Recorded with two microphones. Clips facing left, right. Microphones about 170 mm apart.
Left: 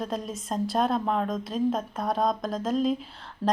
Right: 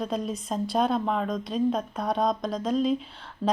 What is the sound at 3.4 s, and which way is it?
Speech, 20° right (ahead or behind).